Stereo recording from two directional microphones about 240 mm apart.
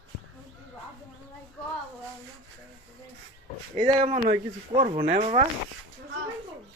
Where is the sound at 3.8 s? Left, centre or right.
Right.